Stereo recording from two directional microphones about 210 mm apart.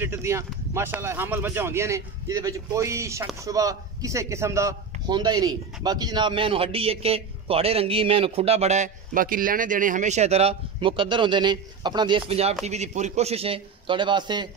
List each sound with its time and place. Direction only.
0.0 s a man's voice: 10° right (ahead or behind)